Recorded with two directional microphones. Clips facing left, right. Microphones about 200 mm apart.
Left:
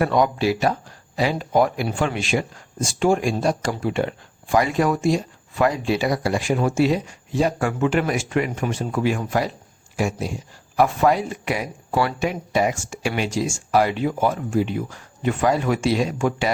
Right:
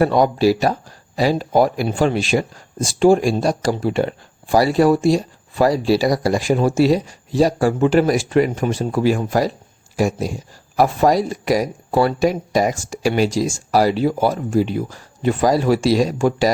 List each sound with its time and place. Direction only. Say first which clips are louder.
0.0 s speech: right 5 dB; 35° right (ahead or behind)